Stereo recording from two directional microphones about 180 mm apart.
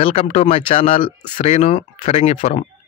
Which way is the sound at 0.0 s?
40° left (ahead or behind).